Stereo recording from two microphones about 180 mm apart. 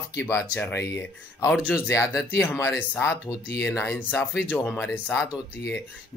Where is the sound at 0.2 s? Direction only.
15° left (ahead or behind).